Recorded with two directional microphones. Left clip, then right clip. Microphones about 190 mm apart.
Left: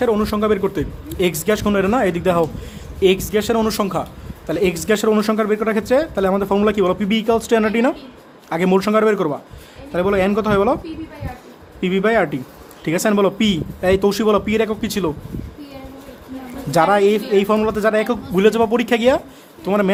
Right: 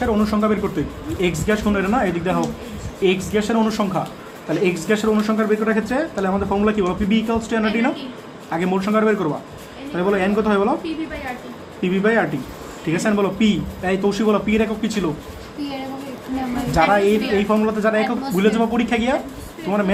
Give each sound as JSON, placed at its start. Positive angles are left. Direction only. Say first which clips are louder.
{"t": 0.0, "sound": "speech", "louder": "left 2 dB", "side_deg": 50}
{"t": 11.8, "sound": "speech", "louder": "left 2 dB", "side_deg": 55}
{"t": 16.7, "sound": "speech", "louder": "left 2 dB", "side_deg": 60}